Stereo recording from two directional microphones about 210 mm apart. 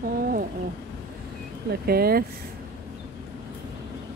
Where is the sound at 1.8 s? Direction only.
45° right (ahead or behind).